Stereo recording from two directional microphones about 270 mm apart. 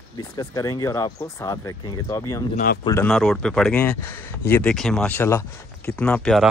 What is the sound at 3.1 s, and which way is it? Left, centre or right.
Speech, centre.